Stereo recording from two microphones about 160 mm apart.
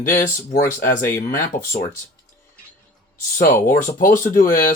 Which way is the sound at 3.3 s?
55° left (ahead or behind).